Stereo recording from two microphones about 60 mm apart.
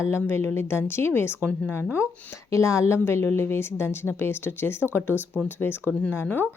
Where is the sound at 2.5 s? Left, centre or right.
Left.